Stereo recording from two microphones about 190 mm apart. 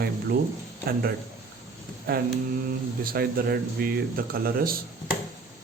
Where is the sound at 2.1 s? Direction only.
50° right (ahead or behind).